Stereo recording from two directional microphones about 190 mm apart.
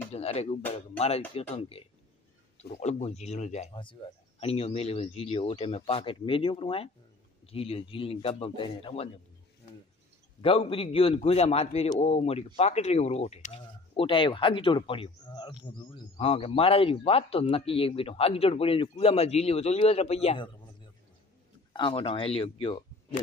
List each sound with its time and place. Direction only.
0.1 s music: 35° left (ahead or behind)
0.7 s a man's voice: 35° left (ahead or behind)
10.4 s a man's voice: 30° left (ahead or behind)
21.7 s speech: 25° left (ahead or behind)